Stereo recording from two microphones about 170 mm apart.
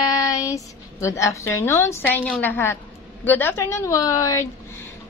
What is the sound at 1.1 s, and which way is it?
A woman's voice, 20° left (ahead or behind).